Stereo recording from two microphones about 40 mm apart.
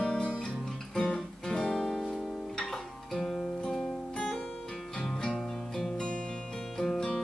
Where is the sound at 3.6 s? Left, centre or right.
Centre.